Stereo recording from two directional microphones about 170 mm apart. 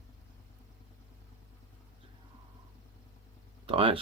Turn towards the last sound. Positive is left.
turn(degrees=-35)  # may be behind; listen again after turning